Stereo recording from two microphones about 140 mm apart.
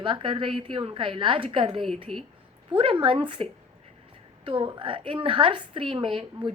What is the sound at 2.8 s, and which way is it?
Speech, 40° right (ahead or behind).